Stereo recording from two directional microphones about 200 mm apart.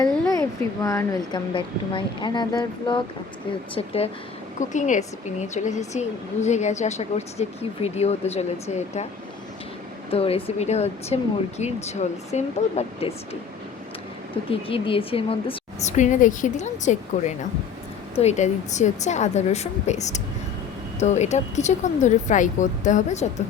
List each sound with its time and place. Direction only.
0.0 s a woman's voice: 15° left (ahead or behind); by 9.0 s 35° left (ahead or behind)
10.1 s a woman's voice: 30° left (ahead or behind)
14.7 s a woman's voice: 25° left (ahead or behind)